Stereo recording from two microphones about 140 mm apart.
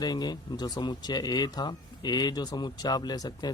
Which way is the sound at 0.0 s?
30° left (ahead or behind).